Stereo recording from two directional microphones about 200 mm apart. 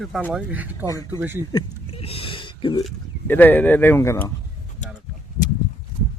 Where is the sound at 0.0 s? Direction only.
Centre (ahead or behind).